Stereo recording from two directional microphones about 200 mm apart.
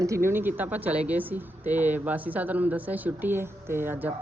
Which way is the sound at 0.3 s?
10° right (ahead or behind).